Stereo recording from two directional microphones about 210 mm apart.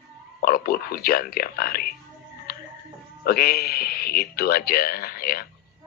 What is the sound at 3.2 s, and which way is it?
Speech, 45° left (ahead or behind).